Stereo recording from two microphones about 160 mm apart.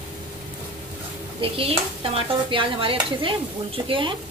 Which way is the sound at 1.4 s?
35° right (ahead or behind).